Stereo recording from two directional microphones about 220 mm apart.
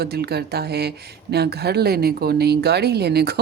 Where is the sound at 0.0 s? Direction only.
45° right (ahead or behind).